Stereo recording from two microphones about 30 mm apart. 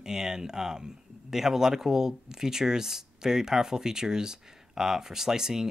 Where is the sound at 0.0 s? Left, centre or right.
Right.